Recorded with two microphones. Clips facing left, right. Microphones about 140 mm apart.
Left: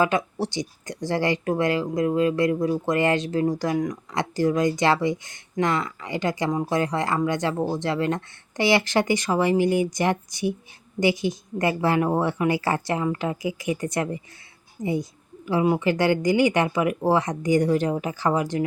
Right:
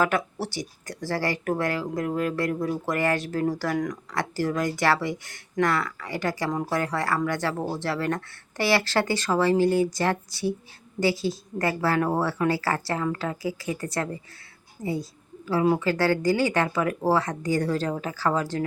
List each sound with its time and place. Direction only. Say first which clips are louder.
0.0 s speech: left 2 dB; 15° left (ahead or behind)